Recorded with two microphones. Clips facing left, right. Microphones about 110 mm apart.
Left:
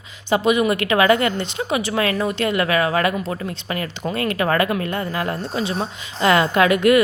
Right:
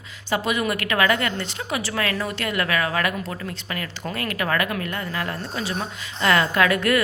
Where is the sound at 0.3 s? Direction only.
20° left (ahead or behind).